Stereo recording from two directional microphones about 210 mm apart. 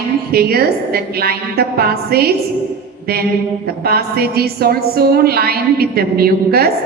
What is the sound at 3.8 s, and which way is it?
A woman's voice, 50° right (ahead or behind).